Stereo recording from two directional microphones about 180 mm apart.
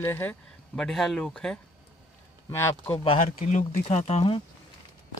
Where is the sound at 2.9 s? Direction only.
30° left (ahead or behind).